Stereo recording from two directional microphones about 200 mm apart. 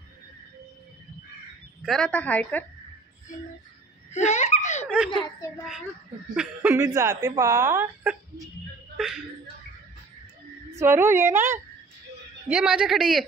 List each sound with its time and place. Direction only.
1.8 s a woman's voice: centre (ahead or behind)
4.1 s laughter: 35° left (ahead or behind)
4.8 s giggle: 5° right (ahead or behind)
6.3 s a woman's voice: 5° right (ahead or behind)
6.8 s a woman's voice: 15° right (ahead or behind)
10.7 s a woman's voice: 15° right (ahead or behind)